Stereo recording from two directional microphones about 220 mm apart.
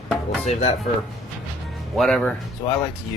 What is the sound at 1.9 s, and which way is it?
Speech, centre (ahead or behind).